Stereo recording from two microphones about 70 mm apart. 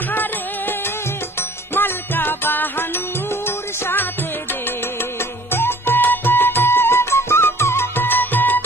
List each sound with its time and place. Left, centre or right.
0.1 s music: left
1.8 s music: left
5.5 s music: left